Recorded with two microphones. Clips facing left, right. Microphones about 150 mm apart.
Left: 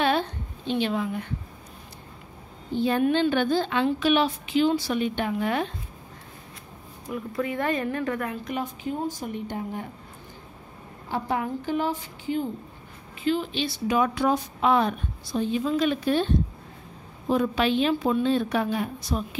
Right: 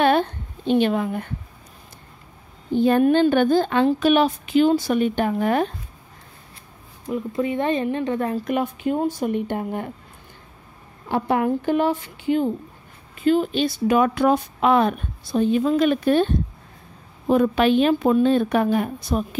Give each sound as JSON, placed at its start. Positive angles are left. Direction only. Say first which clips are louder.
{"t": 0.0, "sound": "a sound", "louder": "right 6 dB", "side_deg": -55}
{"t": 2.7, "sound": "a woman's voice", "louder": "right 6 dB", "side_deg": -50}
{"t": 7.1, "sound": "speech", "louder": "right 5 dB", "side_deg": -20}
{"t": 8.5, "sound": "speech", "louder": "right 7 dB", "side_deg": -65}
{"t": 11.1, "sound": "speech", "louder": "right 7 dB", "side_deg": -65}
{"t": 13.2, "sound": "a woman's voice", "louder": "right 7 dB", "side_deg": -50}